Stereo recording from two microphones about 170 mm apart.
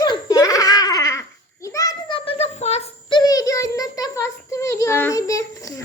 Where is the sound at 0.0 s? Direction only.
25° left (ahead or behind).